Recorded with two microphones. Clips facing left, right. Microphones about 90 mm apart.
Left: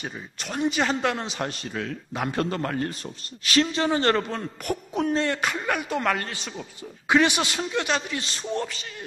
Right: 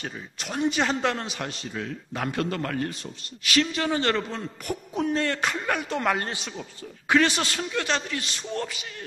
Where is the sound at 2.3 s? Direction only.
30° left (ahead or behind).